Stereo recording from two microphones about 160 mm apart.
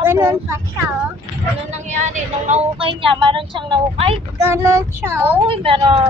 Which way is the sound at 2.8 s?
35° right (ahead or behind).